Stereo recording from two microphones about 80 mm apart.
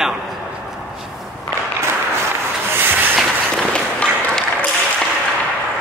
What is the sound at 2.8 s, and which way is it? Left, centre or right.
Train, right.